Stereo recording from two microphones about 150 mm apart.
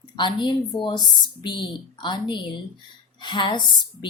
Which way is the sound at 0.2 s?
30° left (ahead or behind).